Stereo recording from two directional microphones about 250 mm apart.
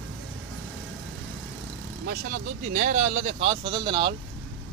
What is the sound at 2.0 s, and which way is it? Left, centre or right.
Speech, right.